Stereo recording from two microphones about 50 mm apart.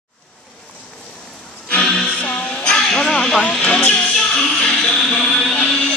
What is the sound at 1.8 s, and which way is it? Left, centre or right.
Music, centre.